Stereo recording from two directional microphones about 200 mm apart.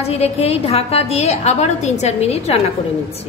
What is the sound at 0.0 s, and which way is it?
A woman's voice, 30° left (ahead or behind).